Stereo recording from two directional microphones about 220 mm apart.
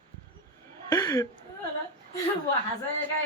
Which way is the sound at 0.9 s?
15° left (ahead or behind).